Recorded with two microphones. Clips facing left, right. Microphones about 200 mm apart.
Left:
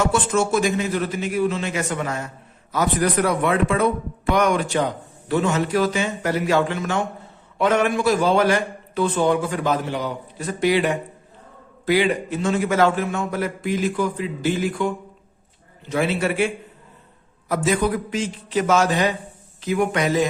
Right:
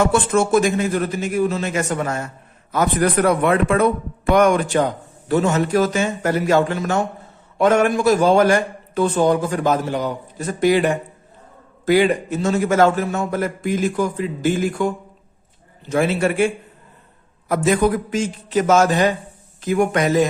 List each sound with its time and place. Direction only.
0.0 s a man's voice: 55° right (ahead or behind)
15.9 s a man's voice: 45° right (ahead or behind)
17.5 s a man's voice: 50° right (ahead or behind)